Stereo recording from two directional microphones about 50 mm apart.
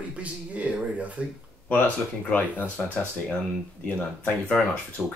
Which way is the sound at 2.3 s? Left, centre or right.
Left.